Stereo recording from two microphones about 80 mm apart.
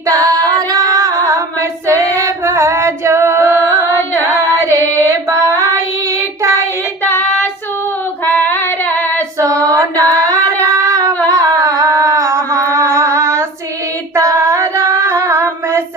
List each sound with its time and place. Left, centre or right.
0.1 s female singing: right
4.2 s carnatic music: right
7.0 s child singing: left
8.2 s female singing: left
9.4 s female singing: right
10.2 s singing: right
11.3 s a sound: right
14.2 s female singing: right